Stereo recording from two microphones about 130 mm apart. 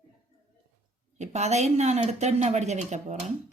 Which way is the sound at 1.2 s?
60° right (ahead or behind).